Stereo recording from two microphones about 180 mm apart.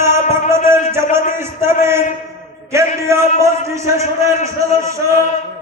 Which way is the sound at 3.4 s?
15° right (ahead or behind).